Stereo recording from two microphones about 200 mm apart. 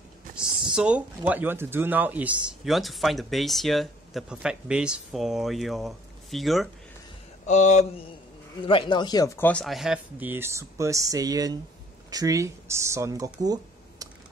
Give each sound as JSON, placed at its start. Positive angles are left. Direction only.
{"t": 0.7, "sound": "speech", "side_deg": -5}
{"t": 7.4, "sound": "a sound", "side_deg": 35}
{"t": 8.6, "sound": "speech", "side_deg": 25}
{"t": 9.5, "sound": "speech", "side_deg": 0}